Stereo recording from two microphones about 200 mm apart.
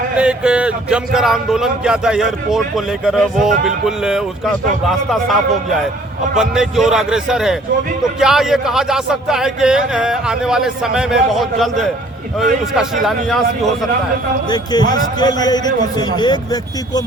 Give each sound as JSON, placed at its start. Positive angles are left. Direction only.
{"t": 0.2, "sound": "speech", "side_deg": -5}
{"t": 14.5, "sound": "a man's voice", "side_deg": 20}